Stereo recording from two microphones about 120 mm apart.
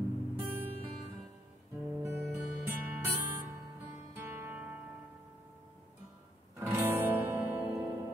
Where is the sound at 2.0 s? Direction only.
20° right (ahead or behind).